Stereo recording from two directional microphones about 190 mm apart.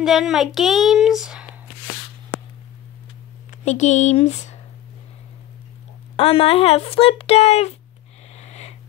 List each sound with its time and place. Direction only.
0.0 s a child's voice: centre (ahead or behind)
3.6 s speech: 40° left (ahead or behind)
6.1 s speech: 30° left (ahead or behind)
8.4 s a sound: 35° left (ahead or behind)